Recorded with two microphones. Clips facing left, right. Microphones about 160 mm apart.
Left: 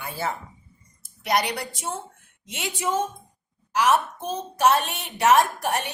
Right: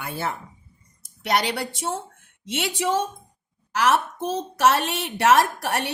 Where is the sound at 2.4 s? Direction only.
85° right.